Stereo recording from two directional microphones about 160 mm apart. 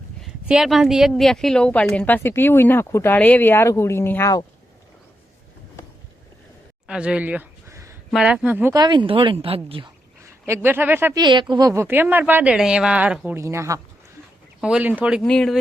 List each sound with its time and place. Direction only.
0.2 s a woman's voice: 5° right (ahead or behind); by 4.4 s 20° left (ahead or behind)
6.8 s a sound: 5° right (ahead or behind)
8.1 s speech: 5° right (ahead or behind)
8.7 s speech: 25° right (ahead or behind)
10.2 s speech: 15° right (ahead or behind)
11.2 s speech: 30° right (ahead or behind)
14.6 s speech: 5° right (ahead or behind)
15.2 s speech: 5° left (ahead or behind)